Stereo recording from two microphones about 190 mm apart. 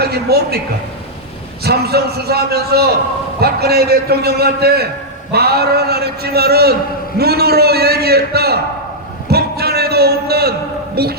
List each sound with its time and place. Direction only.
0.0 s speech: 55° right (ahead or behind)
1.6 s a man's voice: 55° right (ahead or behind)
9.3 s a sound: 55° right (ahead or behind)
10.9 s a man's voice: 55° right (ahead or behind)